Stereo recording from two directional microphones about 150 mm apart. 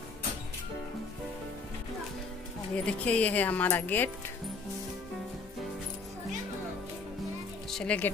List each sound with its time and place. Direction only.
2.7 s speech: 10° left (ahead or behind)
7.7 s speech: 10° left (ahead or behind)